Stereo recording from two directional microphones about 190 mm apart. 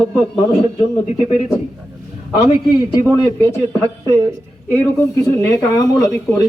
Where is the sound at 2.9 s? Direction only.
15° left (ahead or behind).